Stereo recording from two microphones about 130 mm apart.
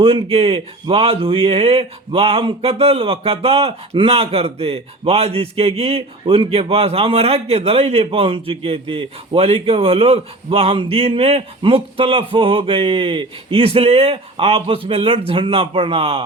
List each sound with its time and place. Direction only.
0.0 s speech: 45° right (ahead or behind)